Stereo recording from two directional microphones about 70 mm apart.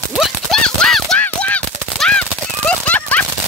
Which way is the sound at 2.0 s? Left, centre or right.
Centre.